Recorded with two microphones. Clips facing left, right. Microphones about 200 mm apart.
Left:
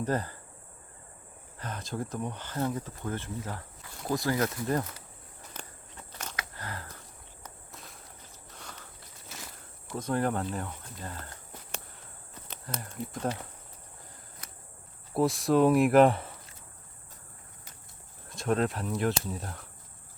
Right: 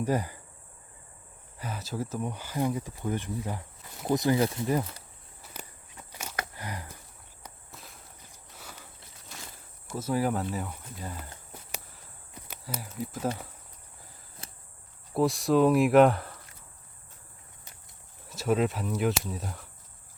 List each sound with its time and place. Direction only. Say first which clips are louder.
0.0 s speech: right 2 dB; 10° right (ahead or behind)
1.5 s speech: right 1 dB; 10° right (ahead or behind)
4.6 s speech: right 2 dB; 10° right (ahead or behind)
5.5 s walk: right 1 dB; 10° right (ahead or behind)
6.1 s a sound: right 4 dB; 10° right (ahead or behind)
7.7 s walk: left 1 dB; centre (ahead or behind)
8.5 s a sound: even; 5° right (ahead or behind)
9.3 s a sound: left 1 dB; 5° left (ahead or behind)
9.9 s speech: right 1 dB; 5° right (ahead or behind)
12.3 s speech: right 1 dB; 10° right (ahead or behind)
14.4 s a sound: right 3 dB; 25° right (ahead or behind)
15.1 s speech: right 1 dB; centre (ahead or behind)
18.3 s speech: right 2 dB; 5° right (ahead or behind)